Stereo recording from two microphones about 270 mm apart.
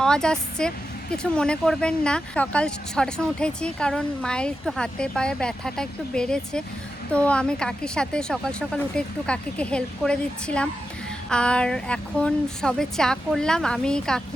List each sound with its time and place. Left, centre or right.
0.0 s a woman's voice: centre